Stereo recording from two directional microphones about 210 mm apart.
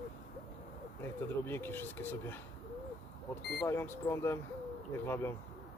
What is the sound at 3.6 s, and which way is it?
Speech, 10° left (ahead or behind).